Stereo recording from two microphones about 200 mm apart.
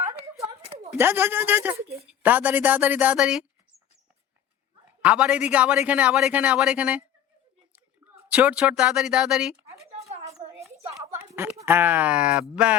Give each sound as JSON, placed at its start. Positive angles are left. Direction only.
{"t": 0.0, "sound": "a sound", "side_deg": -30}
{"t": 0.9, "sound": "a woman's voice", "side_deg": -10}
{"t": 5.0, "sound": "speech", "side_deg": -5}
{"t": 8.3, "sound": "speech", "side_deg": -5}
{"t": 10.2, "sound": "a sound", "side_deg": -15}
{"t": 11.1, "sound": "speech", "side_deg": -15}